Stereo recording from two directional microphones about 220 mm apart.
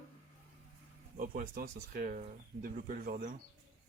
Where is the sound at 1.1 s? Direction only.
40° right (ahead or behind).